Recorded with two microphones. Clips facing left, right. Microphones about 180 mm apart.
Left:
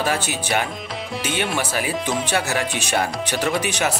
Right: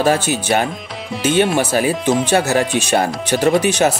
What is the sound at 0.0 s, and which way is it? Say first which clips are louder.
Speech: right 7 dB; 40° right (ahead or behind).